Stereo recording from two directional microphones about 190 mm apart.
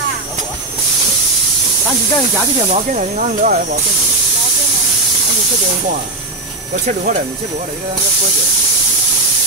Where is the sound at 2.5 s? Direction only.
35° right (ahead or behind).